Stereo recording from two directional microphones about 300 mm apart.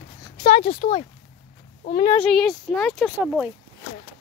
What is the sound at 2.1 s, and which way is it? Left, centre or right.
Speech, centre.